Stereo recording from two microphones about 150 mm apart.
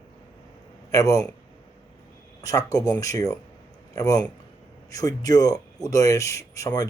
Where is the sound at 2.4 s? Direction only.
25° left (ahead or behind).